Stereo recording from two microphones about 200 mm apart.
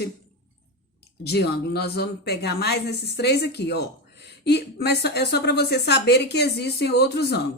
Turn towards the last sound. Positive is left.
turn(degrees=55)  # may be behind; listen again after turning